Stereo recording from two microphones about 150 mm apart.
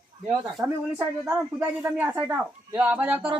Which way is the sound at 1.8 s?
15° right (ahead or behind).